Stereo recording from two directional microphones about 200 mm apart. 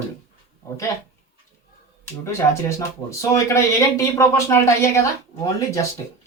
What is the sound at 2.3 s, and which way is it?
Speech, 15° left (ahead or behind).